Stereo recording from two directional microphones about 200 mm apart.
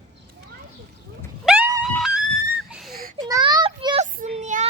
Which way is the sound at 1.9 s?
Centre (ahead or behind).